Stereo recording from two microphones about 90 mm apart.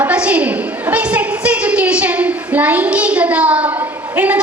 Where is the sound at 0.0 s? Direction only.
15° right (ahead or behind).